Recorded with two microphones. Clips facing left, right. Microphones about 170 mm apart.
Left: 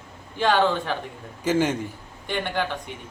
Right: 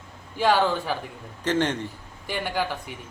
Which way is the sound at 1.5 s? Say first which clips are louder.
Left 2 dB; 10° left (ahead or behind).